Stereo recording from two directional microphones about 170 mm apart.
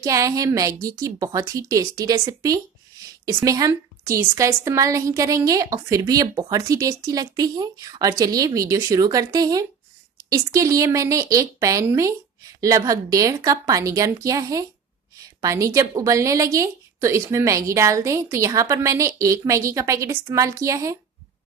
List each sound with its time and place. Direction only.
0.0 s a woman's voice: 20° right (ahead or behind)